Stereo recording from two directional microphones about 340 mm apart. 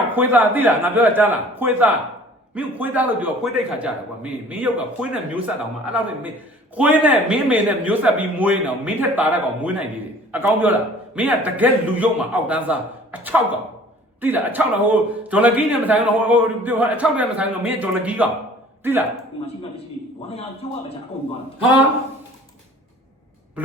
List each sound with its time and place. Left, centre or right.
0.1 s a man's voice: centre
6.7 s a man's voice: centre